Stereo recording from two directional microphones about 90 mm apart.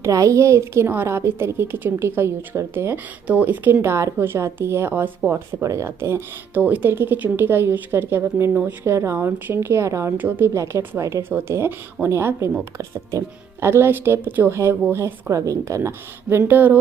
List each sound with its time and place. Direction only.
0.0 s a woman's voice: 40° right (ahead or behind); by 3.8 s 15° right (ahead or behind)
3.8 s speech: 30° right (ahead or behind)
5.6 s speech: 35° right (ahead or behind)
10.1 s speech: 20° right (ahead or behind)